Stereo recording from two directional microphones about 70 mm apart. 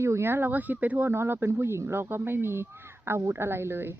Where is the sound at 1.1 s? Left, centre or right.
Right.